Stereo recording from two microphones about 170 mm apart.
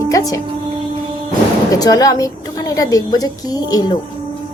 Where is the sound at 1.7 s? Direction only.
20° left (ahead or behind).